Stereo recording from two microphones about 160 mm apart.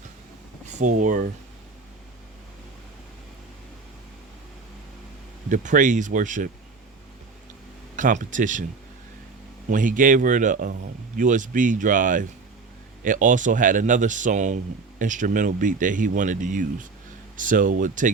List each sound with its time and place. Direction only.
0.6 s speech: 50° right (ahead or behind)
5.5 s speech: 50° right (ahead or behind)
7.9 s speech: 55° right (ahead or behind)
9.6 s speech: 55° right (ahead or behind)